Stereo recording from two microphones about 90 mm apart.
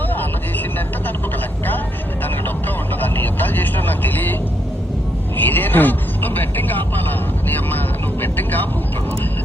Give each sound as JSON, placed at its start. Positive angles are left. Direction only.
{"t": 2.2, "sound": "music", "side_deg": 20}
{"t": 5.4, "sound": "music", "side_deg": 20}
{"t": 7.4, "sound": "vehicle", "side_deg": 20}